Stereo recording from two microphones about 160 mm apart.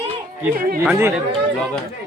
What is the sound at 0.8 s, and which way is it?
Speech, 15° right (ahead or behind).